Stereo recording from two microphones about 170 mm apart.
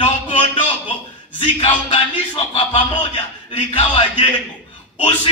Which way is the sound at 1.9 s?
35° left (ahead or behind).